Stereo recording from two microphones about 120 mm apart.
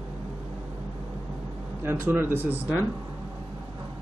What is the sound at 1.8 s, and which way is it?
Speech, 20° right (ahead or behind).